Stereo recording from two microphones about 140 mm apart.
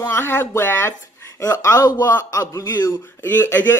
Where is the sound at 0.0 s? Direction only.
15° left (ahead or behind).